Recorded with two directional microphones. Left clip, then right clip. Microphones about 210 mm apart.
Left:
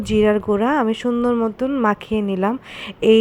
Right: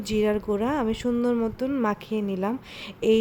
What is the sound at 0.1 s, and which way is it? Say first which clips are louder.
A woman's voice: left 8 dB; 15° left (ahead or behind).